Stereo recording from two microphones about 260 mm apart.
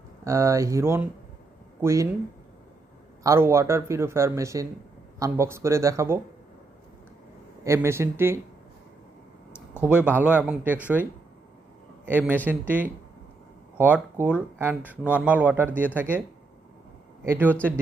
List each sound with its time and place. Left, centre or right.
0.3 s speech: centre
3.2 s speech: centre
7.6 s speech: centre
9.8 s speech: centre
17.2 s speech: centre